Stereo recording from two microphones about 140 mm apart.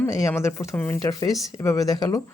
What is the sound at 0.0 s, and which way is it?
Speech, 20° left (ahead or behind).